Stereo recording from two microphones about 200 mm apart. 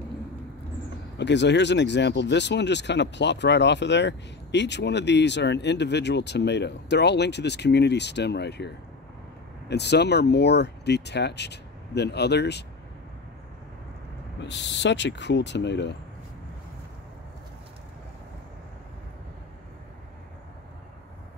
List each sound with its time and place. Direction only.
1.1 s speech: 60° left (ahead or behind)
9.7 s speech: 55° left (ahead or behind)
14.4 s speech: 60° left (ahead or behind)